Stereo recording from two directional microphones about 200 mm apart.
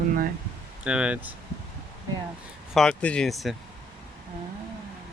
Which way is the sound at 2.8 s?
5° left (ahead or behind).